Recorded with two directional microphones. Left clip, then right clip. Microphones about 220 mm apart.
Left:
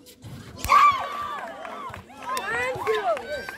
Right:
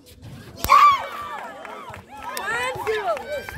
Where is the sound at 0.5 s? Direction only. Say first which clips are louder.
Right 3 dB; 35° right (ahead or behind).